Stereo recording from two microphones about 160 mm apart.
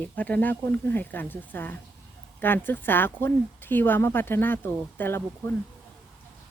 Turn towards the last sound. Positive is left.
turn(degrees=10)  # may be behind; listen again after turning